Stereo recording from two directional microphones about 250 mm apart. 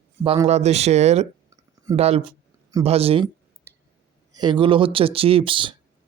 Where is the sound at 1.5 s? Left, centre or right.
Centre.